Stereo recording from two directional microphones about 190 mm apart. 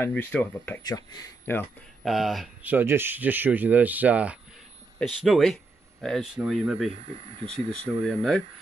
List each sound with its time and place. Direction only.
0.0 s speech: 10° left (ahead or behind)
2.0 s speech: centre (ahead or behind)
6.9 s speech: 30° right (ahead or behind)
7.8 s speech: 5° left (ahead or behind)